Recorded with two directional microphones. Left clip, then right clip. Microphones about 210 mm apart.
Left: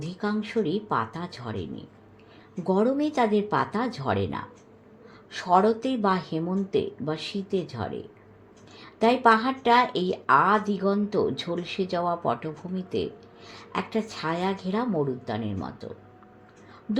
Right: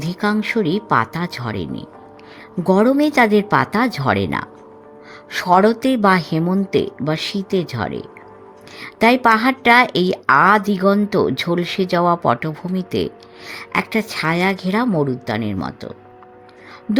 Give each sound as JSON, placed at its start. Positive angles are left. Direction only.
{"t": 0.0, "sound": "a woman's voice", "side_deg": -55}